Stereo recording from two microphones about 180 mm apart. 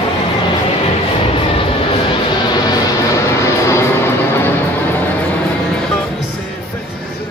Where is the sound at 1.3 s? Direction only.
30° left (ahead or behind).